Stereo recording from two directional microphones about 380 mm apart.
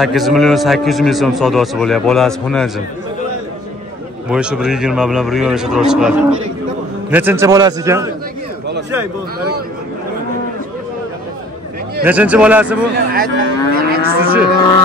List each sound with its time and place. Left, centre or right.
0.0 s a man's voice: centre
4.3 s a man's voice: centre
12.0 s a man's voice: centre
12.9 s moo: right